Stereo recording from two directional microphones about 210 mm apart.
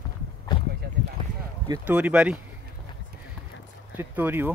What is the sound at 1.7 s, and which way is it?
Speech, 10° right (ahead or behind).